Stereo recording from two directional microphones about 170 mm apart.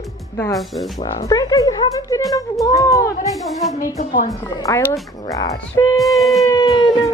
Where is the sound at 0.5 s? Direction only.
Centre (ahead or behind).